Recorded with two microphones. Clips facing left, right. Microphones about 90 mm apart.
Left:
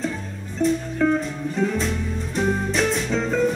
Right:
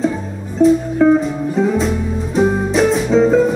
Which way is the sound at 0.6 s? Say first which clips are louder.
Right 10 dB; centre (ahead or behind).